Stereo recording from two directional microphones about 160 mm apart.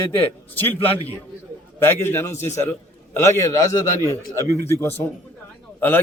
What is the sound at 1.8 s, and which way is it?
A man's voice, 15° left (ahead or behind).